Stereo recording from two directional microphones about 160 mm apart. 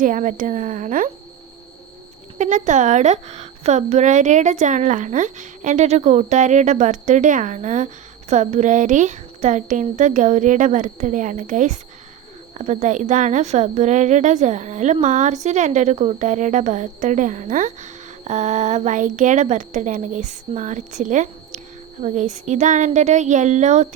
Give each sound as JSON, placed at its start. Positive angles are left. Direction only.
{"t": 0.0, "sound": "a woman's voice", "side_deg": -55}
{"t": 2.4, "sound": "a woman's voice", "side_deg": -50}